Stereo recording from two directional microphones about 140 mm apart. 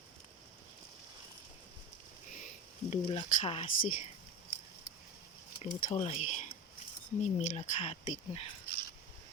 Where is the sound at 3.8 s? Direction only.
70° left (ahead or behind).